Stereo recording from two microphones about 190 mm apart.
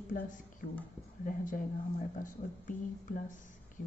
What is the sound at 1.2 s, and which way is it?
A woman's voice, 45° left (ahead or behind).